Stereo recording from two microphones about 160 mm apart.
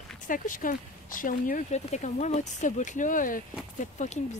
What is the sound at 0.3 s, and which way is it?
Speech, 55° left (ahead or behind).